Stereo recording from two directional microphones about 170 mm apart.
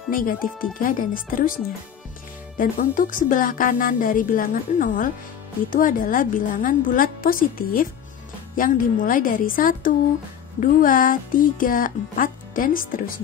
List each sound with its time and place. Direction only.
0.1 s a woman's voice: 55° left (ahead or behind)